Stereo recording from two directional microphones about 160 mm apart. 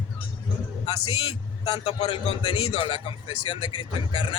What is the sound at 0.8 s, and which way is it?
A man's voice, 35° left (ahead or behind).